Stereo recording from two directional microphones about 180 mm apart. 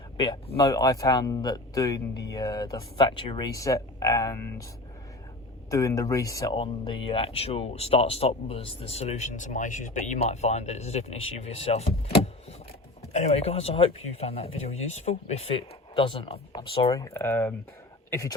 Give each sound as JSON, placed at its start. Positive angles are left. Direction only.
{"t": 0.2, "sound": "speech", "side_deg": 30}
{"t": 0.7, "sound": "speech", "side_deg": 20}
{"t": 5.7, "sound": "speech", "side_deg": 20}
{"t": 16.9, "sound": "speech", "side_deg": 15}